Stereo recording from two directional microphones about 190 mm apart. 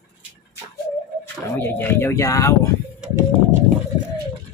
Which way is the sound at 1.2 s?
10° left (ahead or behind).